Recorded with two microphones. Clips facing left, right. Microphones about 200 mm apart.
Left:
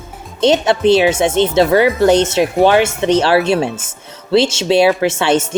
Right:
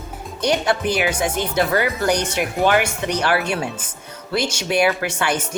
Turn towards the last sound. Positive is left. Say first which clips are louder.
# left 8 dB
turn(degrees=25)  # may be behind; listen again after turning